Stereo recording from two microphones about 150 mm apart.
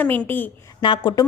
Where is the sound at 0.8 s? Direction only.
30° left (ahead or behind).